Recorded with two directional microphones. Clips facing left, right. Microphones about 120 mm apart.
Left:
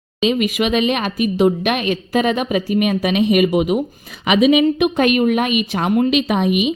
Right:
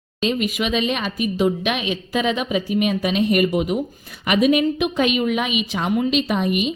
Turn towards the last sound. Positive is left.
turn(degrees=70)  # may be behind; listen again after turning